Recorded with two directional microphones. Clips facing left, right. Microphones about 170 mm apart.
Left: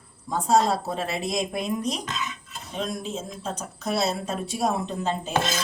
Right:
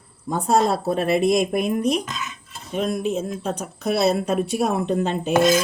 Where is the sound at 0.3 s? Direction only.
55° right (ahead or behind).